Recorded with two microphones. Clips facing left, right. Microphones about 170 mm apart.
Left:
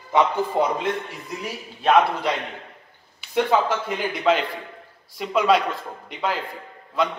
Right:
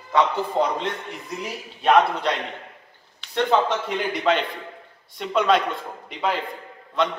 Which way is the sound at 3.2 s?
5° left (ahead or behind).